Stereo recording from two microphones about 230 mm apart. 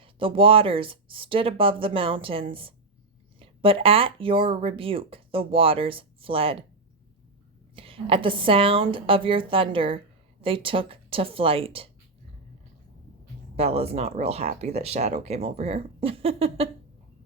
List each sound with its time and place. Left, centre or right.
0.0 s speech: right
7.8 s speech: right
13.6 s speech: right